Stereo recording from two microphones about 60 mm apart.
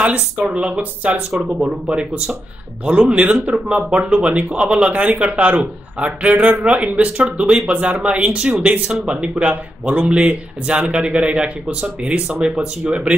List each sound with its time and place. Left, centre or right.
0.0 s speech: right
1.3 s speech: centre
2.8 s speech: centre